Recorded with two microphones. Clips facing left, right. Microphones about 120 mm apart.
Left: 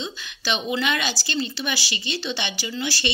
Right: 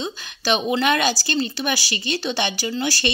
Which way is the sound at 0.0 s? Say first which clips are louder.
Right 4 dB; 45° right (ahead or behind).